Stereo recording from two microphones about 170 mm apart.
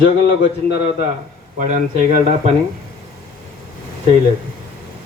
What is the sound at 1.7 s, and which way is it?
Speech, 45° right (ahead or behind).